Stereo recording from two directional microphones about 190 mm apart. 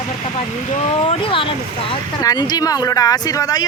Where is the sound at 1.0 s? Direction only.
25° left (ahead or behind).